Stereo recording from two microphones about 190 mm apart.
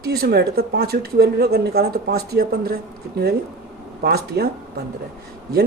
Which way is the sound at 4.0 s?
55° right (ahead or behind).